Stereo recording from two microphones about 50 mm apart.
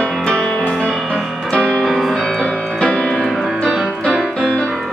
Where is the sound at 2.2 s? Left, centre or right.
Centre.